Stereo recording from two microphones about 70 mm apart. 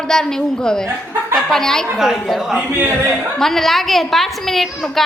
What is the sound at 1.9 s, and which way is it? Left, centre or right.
A woman's voice, centre.